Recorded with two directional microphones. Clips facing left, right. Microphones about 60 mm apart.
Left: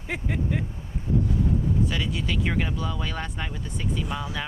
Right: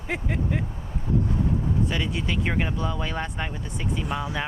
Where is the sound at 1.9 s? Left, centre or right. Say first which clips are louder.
Right 1 dB; centre.